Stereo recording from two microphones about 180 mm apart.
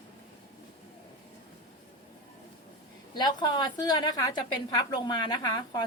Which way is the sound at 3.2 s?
25° left (ahead or behind).